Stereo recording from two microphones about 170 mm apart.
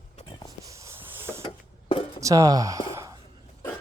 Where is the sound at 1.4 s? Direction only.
30° left (ahead or behind).